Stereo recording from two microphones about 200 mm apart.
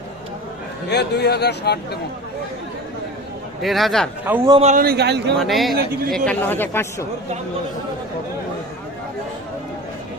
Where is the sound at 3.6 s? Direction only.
Centre (ahead or behind).